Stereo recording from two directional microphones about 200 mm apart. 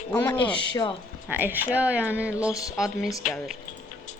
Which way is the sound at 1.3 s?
10° right (ahead or behind).